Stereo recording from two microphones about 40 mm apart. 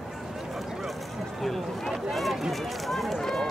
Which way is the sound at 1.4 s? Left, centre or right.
Centre.